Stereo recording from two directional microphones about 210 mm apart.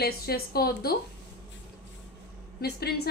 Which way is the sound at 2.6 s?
50° left (ahead or behind).